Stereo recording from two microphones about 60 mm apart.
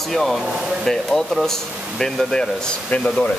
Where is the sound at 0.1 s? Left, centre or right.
Centre.